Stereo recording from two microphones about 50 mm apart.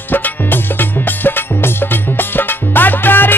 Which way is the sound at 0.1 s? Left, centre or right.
Left.